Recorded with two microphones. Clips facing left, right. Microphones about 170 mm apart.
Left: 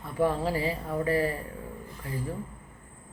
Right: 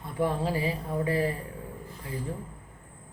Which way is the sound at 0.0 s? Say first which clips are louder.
Left 2 dB; 15° right (ahead or behind).